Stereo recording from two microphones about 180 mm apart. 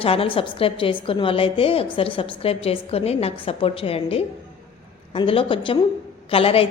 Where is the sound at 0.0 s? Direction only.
30° left (ahead or behind).